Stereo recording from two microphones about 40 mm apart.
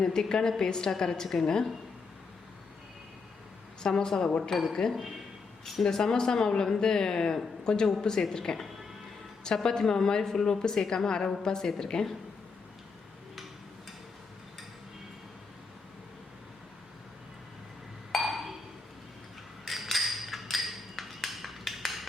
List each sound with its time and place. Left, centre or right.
0.0 s a woman's voice: centre
3.8 s a woman's voice: centre
4.9 s speech: centre
5.8 s a woman's voice: centre
18.1 s chink: centre
19.6 s a sound: centre